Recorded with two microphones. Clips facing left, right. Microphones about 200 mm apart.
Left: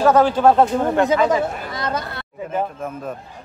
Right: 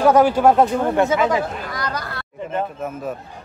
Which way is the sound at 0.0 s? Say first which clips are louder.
Even; 10° right (ahead or behind).